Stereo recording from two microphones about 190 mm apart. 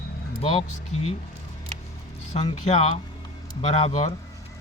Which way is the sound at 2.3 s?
35° left (ahead or behind).